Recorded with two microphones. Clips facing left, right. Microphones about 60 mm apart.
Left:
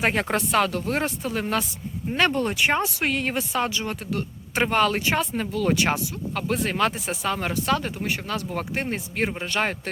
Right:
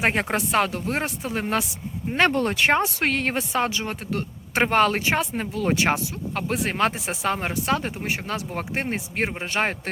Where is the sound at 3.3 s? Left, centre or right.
Right.